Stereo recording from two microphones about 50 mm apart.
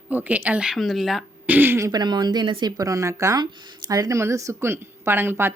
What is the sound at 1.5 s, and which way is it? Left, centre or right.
Throat clearing, right.